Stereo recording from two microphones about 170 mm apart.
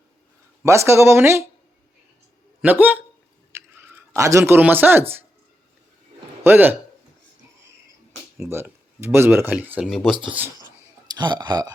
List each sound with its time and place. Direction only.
0.6 s speech: 15° right (ahead or behind)
2.6 s speech: 10° right (ahead or behind)
6.4 s a man's voice: 15° right (ahead or behind)
8.4 s speech: 15° right (ahead or behind)
11.1 s speech: 25° right (ahead or behind)